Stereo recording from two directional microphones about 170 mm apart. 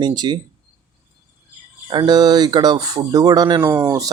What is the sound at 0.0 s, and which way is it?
Speech, 25° right (ahead or behind).